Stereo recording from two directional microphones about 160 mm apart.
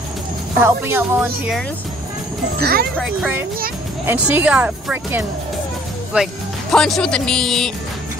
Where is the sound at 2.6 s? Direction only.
70° right (ahead or behind).